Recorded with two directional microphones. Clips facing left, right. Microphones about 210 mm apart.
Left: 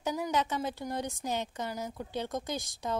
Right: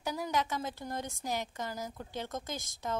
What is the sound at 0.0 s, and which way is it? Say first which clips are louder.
A woman's voice: left 3 dB; 20° left (ahead or behind).